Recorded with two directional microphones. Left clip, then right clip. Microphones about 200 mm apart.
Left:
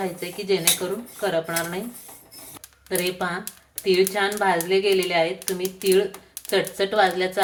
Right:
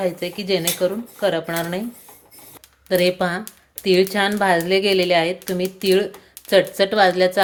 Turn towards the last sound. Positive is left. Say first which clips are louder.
# right 5 dB
turn(degrees=-40)  # may be behind; listen again after turning